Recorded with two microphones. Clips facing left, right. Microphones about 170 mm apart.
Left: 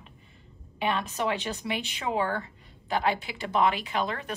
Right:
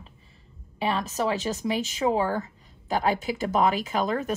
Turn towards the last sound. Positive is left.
turn(degrees=-40)  # may be behind; listen again after turning